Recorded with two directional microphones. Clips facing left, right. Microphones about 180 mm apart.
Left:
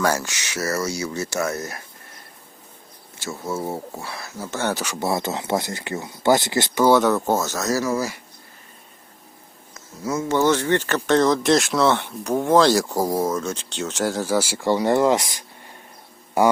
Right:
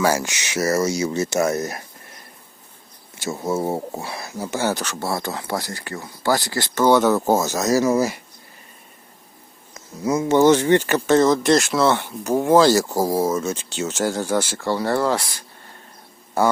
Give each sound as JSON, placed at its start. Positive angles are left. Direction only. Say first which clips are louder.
{"t": 0.0, "sound": "speech", "louder": "right 2 dB", "side_deg": -10}
{"t": 0.3, "sound": "speech", "louder": "right 5 dB", "side_deg": -20}
{"t": 3.2, "sound": "speech", "louder": "right 4 dB", "side_deg": -20}
{"t": 4.7, "sound": "speech", "louder": "left 1 dB", "side_deg": 10}
{"t": 6.8, "sound": "speech", "louder": "right 1 dB", "side_deg": 0}
{"t": 10.0, "sound": "speech", "louder": "right 5 dB", "side_deg": -15}